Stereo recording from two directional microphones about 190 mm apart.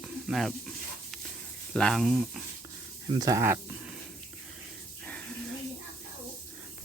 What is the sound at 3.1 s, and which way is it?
Speech, 15° right (ahead or behind).